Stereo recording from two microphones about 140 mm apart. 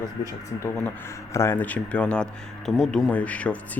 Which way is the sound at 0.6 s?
20° left (ahead or behind).